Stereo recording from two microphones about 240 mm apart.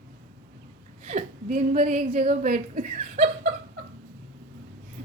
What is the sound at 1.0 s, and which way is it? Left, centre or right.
A woman's voice, right.